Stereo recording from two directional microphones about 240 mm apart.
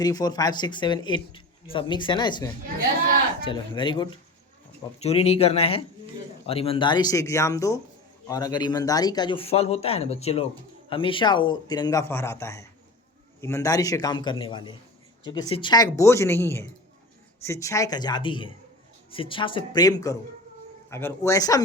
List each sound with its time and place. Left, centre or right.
0.0 s a man's voice: centre